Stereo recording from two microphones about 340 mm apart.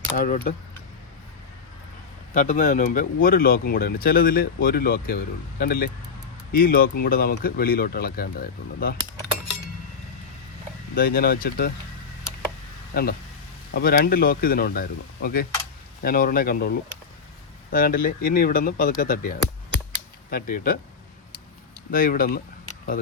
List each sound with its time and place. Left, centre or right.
0.2 s speech: left
2.3 s speech: left
10.9 s speech: left
12.9 s speech: left
21.9 s speech: left